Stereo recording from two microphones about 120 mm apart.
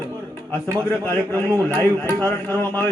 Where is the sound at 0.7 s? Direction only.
15° left (ahead or behind).